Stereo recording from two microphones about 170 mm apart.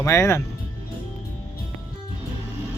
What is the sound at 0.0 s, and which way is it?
Speech, 15° left (ahead or behind).